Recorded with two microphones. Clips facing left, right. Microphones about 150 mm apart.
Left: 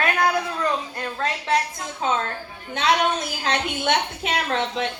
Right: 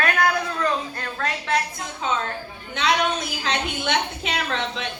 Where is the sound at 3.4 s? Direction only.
50° left (ahead or behind).